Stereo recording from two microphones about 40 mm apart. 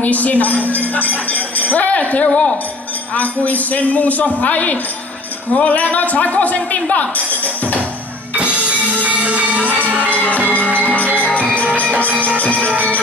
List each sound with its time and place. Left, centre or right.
0.0 s speech: left
8.4 s music: right
9.0 s a sound: right
9.7 s music: left
11.5 s music: right